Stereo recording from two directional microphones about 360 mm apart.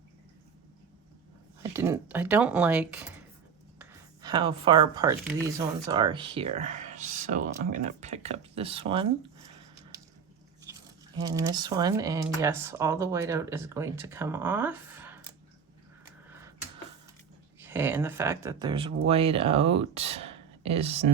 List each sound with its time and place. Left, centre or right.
1.7 s speech: centre
3.8 s a sound: centre
5.5 s speech: centre
11.2 s speech: centre
17.6 s speech: centre